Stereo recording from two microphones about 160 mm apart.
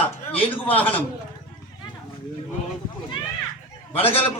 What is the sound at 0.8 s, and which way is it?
Speech, 10° left (ahead or behind).